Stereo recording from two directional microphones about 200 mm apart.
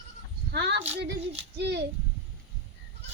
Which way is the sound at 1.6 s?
55° right (ahead or behind).